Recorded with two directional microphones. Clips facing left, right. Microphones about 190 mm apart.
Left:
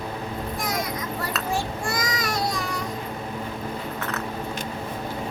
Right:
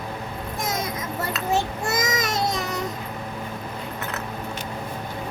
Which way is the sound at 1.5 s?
20° right (ahead or behind).